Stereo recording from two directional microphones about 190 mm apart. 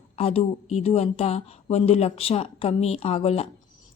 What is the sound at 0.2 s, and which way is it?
Speech, 30° left (ahead or behind).